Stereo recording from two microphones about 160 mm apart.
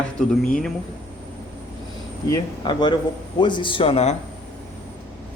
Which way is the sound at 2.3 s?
30° left (ahead or behind).